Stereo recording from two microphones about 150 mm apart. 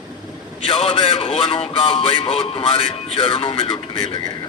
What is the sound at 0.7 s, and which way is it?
Music, 35° left (ahead or behind).